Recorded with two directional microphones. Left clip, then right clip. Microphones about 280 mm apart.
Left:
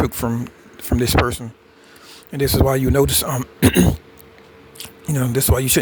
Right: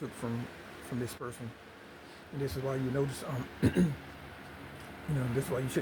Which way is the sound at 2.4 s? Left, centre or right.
Left.